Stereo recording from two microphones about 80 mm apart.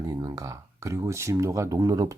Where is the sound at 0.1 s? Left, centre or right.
Right.